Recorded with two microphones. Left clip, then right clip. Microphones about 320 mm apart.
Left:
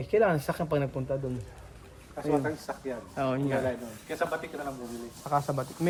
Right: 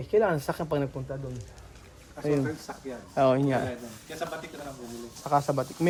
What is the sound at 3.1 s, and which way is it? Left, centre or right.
Speech, centre.